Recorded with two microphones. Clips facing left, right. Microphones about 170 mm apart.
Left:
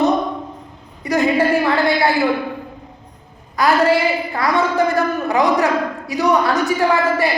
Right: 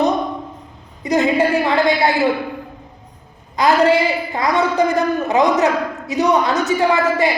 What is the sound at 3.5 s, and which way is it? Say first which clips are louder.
A woman's voice: right 1 dB; 20° right (ahead or behind).